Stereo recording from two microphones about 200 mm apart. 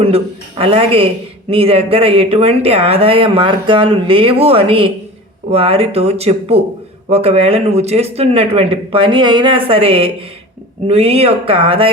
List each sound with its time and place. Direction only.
0.0 s a man's voice: 30° right (ahead or behind)